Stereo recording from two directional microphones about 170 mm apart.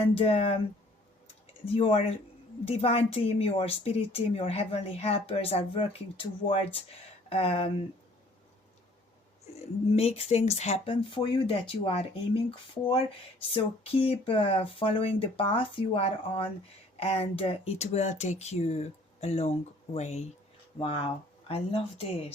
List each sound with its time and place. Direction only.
0.0 s a woman's voice: 35° left (ahead or behind)
1.6 s a woman's voice: 35° left (ahead or behind)
9.9 s a woman's voice: 35° left (ahead or behind)